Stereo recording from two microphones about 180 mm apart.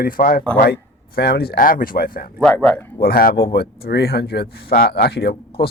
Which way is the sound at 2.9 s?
55° left (ahead or behind).